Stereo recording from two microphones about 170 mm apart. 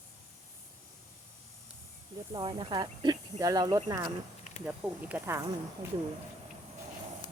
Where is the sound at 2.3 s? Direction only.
25° right (ahead or behind).